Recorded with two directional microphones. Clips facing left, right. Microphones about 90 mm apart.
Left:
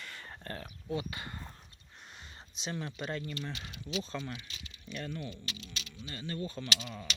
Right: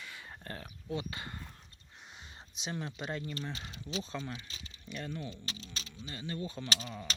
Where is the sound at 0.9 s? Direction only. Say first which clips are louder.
Left 1 dB; 25° right (ahead or behind).